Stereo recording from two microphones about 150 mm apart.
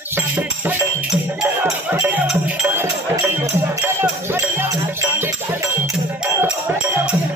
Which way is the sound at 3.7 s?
15° right (ahead or behind).